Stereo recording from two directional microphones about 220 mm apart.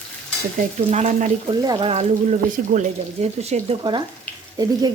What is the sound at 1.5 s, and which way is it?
Speech, 20° right (ahead or behind).